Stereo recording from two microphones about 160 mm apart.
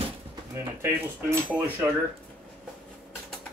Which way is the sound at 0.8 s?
15° right (ahead or behind).